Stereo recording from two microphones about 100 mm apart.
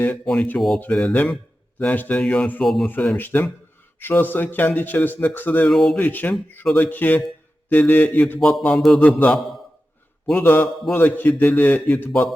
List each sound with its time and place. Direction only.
0.0 s speech: 15° left (ahead or behind)
5.7 s a sound: 5° left (ahead or behind)
6.0 s speech: 20° left (ahead or behind)
8.4 s a sound: 5° left (ahead or behind)
9.0 s speech: 20° left (ahead or behind)
10.3 s speech: 20° left (ahead or behind)